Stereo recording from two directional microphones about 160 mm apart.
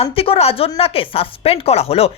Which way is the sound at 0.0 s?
35° left (ahead or behind).